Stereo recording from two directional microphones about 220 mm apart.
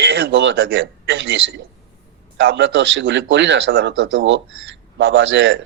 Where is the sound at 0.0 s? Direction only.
55° right (ahead or behind).